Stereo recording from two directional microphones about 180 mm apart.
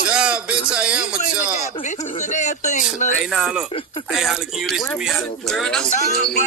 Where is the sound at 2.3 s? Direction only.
40° left (ahead or behind).